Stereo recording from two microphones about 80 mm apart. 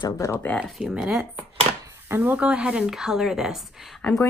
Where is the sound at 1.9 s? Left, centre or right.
Right.